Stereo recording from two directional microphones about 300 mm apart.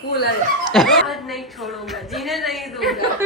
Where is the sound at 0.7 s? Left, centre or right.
Centre.